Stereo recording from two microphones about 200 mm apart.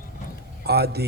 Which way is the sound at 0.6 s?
55° right (ahead or behind).